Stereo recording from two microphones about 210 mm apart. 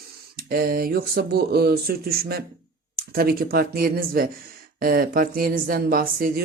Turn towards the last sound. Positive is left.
turn(degrees=-45)  # may be behind; listen again after turning